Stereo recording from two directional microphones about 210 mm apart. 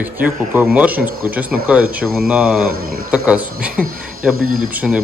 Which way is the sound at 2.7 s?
45° right (ahead or behind).